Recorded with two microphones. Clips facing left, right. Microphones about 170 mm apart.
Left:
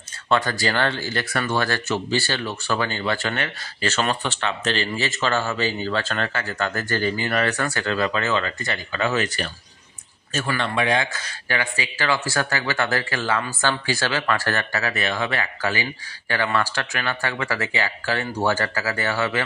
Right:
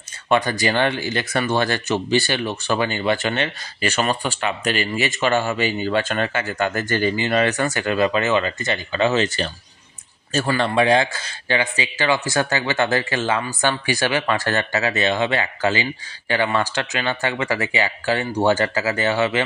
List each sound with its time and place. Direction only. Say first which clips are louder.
0.3 s speech: right 3 dB; 15° right (ahead or behind)